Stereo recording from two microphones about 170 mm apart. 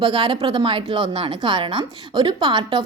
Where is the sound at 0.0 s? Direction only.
35° right (ahead or behind).